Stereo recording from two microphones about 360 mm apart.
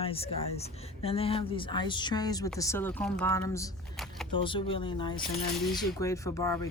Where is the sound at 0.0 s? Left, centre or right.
Centre.